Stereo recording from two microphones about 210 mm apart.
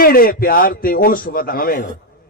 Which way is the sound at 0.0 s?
45° left (ahead or behind).